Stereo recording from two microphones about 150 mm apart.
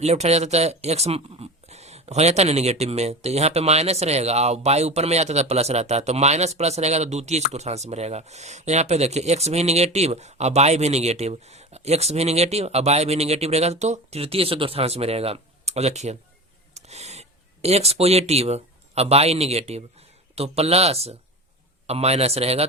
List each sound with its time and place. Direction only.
0.0 s speech: 45° right (ahead or behind)